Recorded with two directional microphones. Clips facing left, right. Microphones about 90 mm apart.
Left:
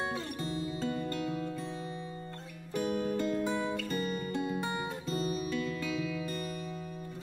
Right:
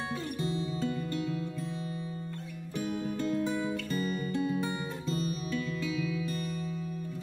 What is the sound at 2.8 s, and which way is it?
Music, 55° left (ahead or behind).